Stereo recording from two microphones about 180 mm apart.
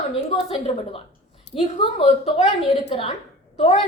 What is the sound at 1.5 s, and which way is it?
A woman's voice, 30° left (ahead or behind).